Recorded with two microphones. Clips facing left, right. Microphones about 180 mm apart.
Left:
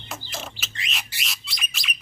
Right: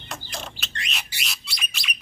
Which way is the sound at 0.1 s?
Centre (ahead or behind).